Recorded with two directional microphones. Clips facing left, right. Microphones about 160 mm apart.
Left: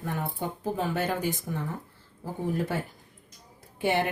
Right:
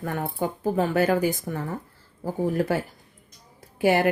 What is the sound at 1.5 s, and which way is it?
Speech, 55° right (ahead or behind).